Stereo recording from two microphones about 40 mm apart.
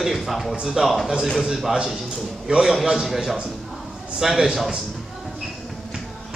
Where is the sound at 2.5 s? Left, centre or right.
Centre.